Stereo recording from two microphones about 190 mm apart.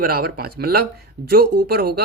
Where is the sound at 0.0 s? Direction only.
50° right (ahead or behind).